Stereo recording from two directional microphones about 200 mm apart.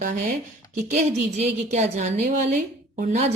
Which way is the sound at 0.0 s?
40° right (ahead or behind).